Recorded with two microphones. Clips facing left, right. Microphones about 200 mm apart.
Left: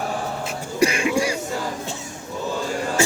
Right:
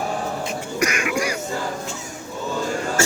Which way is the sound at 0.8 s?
30° left (ahead or behind).